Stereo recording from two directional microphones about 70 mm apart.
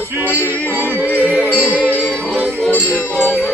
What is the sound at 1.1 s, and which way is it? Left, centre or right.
Music, centre.